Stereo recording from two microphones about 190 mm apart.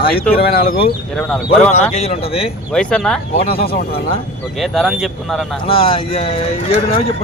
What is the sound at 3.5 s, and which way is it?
Speech, 55° left (ahead or behind).